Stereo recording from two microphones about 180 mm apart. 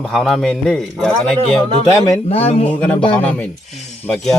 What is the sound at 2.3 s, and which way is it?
Speech, 35° left (ahead or behind).